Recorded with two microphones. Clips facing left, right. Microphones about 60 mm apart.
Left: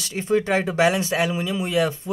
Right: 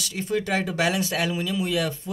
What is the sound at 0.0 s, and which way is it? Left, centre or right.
Speech, left.